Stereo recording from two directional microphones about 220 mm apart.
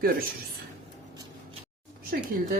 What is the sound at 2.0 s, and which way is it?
Speech, 40° right (ahead or behind).